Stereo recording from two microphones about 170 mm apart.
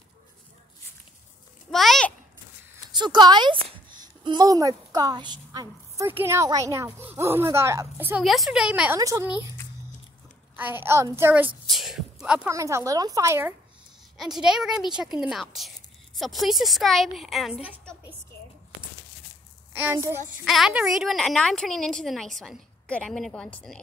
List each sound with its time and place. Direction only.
1.7 s a sound: centre (ahead or behind)
2.9 s a woman's voice: 25° right (ahead or behind)
8.2 s a woman's voice: centre (ahead or behind)
9.0 s a woman's voice: 20° right (ahead or behind)
10.5 s speech: 10° right (ahead or behind)
11.7 s a sound: centre (ahead or behind)
12.4 s speech: 15° right (ahead or behind)
14.1 s a woman's voice: centre (ahead or behind)
19.7 s a woman's voice: 10° right (ahead or behind)
20.4 s a woman's voice: centre (ahead or behind)